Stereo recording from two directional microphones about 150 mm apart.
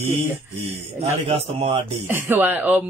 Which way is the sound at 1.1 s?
45° right (ahead or behind).